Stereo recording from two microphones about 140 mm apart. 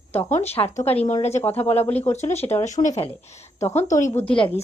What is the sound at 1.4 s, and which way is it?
Speech, 15° left (ahead or behind).